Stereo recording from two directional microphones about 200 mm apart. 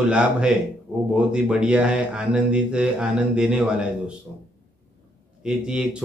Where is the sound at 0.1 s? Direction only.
5° right (ahead or behind).